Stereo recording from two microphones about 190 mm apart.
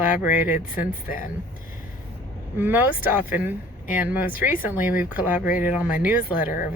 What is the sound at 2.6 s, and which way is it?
Speech, 10° right (ahead or behind).